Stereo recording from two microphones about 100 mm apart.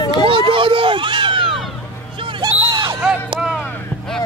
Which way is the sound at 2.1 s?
60° right (ahead or behind).